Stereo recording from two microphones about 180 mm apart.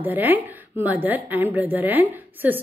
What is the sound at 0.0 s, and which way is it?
A woman's voice, 10° right (ahead or behind).